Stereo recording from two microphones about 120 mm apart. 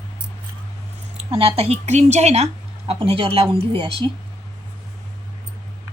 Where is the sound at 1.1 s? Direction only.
60° right (ahead or behind).